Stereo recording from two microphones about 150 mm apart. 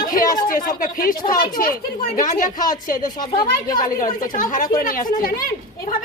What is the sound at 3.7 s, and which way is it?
A woman's voice, 65° left (ahead or behind).